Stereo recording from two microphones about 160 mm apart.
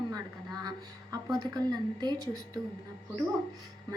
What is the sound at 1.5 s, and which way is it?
Speech, 25° right (ahead or behind).